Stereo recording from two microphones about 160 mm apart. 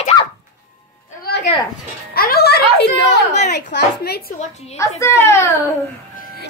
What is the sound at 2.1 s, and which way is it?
Speech, 70° left (ahead or behind).